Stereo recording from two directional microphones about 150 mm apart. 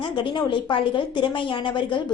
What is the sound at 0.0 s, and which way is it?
A woman's voice, 30° left (ahead or behind).